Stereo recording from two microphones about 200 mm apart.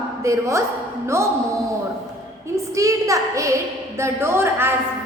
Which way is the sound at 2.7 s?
15° right (ahead or behind).